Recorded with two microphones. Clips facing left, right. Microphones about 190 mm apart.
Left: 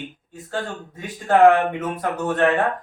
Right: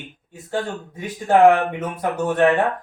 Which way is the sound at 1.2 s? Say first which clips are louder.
Even; 20° right (ahead or behind).